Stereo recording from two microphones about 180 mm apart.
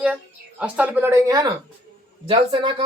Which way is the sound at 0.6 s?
10° right (ahead or behind).